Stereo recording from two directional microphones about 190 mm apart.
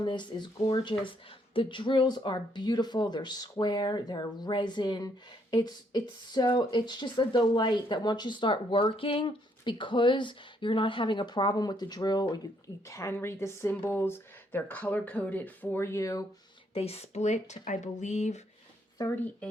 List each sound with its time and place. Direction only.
0.0 s speech: 25° left (ahead or behind)
16.7 s speech: 30° left (ahead or behind)
18.9 s speech: 10° left (ahead or behind)